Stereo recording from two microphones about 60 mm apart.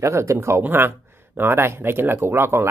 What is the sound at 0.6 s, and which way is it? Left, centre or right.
Speech, right.